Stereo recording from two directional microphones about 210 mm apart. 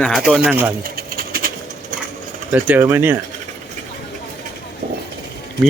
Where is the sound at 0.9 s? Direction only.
45° right (ahead or behind).